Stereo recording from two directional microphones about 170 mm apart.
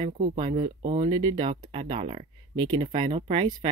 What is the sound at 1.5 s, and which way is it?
Speech, 35° right (ahead or behind).